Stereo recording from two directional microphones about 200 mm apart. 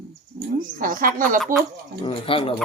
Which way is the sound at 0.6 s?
45° right (ahead or behind).